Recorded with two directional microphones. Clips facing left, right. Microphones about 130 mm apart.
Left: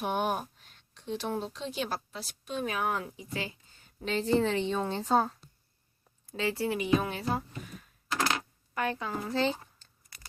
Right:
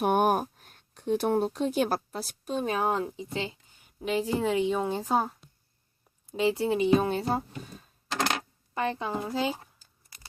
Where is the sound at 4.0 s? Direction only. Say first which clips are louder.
Even; 10° right (ahead or behind); by 7.8 s 30° right (ahead or behind).